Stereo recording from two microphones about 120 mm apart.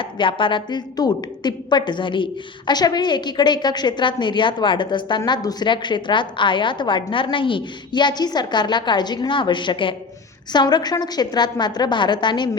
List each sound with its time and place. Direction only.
0.0 s a woman's voice: 45° left (ahead or behind)